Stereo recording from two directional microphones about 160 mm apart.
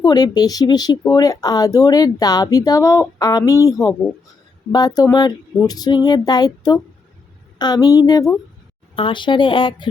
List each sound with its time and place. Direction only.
0.0 s speech: 25° left (ahead or behind)